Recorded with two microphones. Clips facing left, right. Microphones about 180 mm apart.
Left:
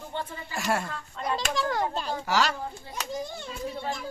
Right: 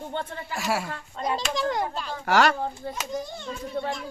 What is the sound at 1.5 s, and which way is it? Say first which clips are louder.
Speech: even; 20° right (ahead or behind).